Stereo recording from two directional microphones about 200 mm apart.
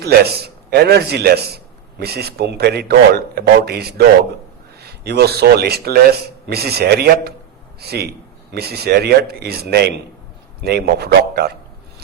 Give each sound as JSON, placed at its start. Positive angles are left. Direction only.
{"t": 0.0, "sound": "a man's voice", "side_deg": -50}